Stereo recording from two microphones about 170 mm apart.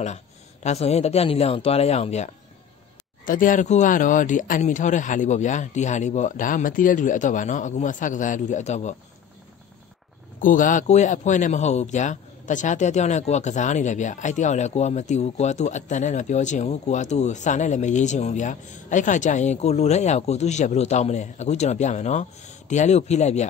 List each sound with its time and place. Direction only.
0.7 s speech: 40° left (ahead or behind)
3.3 s speech: 50° left (ahead or behind)
10.4 s speech: 50° left (ahead or behind)